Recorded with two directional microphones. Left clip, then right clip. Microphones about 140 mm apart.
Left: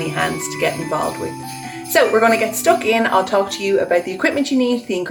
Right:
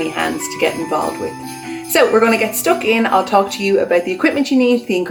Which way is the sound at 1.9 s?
20° right (ahead or behind).